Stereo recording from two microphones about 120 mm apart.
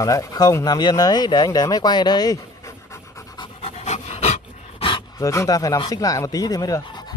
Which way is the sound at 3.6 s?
60° left (ahead or behind).